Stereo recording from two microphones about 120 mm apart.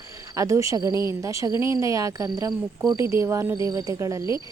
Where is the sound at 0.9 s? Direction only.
35° left (ahead or behind).